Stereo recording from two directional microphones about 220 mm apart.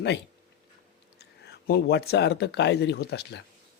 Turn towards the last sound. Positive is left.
turn(degrees=50)  # may be behind; listen again after turning